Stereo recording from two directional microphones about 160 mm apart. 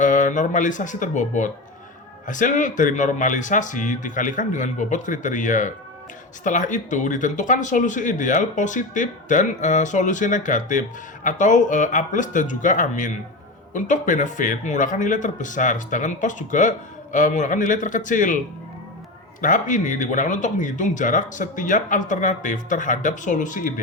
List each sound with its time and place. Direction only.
0.0 s speech: 55° left (ahead or behind)
19.4 s speech: 55° left (ahead or behind)